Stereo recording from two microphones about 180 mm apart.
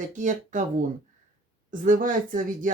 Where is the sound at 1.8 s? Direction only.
50° right (ahead or behind).